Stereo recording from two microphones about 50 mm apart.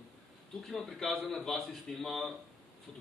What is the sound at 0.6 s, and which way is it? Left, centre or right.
A man's voice, centre.